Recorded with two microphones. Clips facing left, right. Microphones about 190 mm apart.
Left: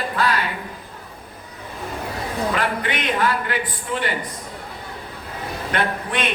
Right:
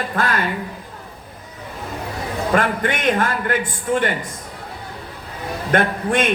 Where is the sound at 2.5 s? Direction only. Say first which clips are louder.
Right 4 dB; 45° right (ahead or behind).